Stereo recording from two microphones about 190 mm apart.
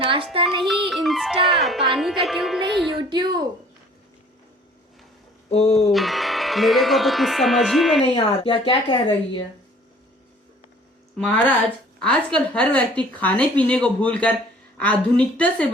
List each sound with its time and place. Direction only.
0.0 s music: 30° right (ahead or behind)
0.6 s music: centre (ahead or behind)
3.0 s music: 25° right (ahead or behind)
5.5 s speech: 35° left (ahead or behind)
5.7 s music: centre (ahead or behind)
8.0 s a woman's voice: 30° left (ahead or behind)
11.9 s speech: 5° left (ahead or behind)